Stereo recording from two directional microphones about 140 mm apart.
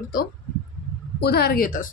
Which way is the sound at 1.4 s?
85° left.